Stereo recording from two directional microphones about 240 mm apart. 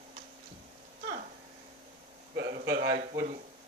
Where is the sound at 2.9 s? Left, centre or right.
Right.